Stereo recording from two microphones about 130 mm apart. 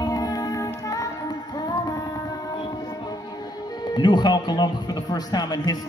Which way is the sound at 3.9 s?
35° left (ahead or behind).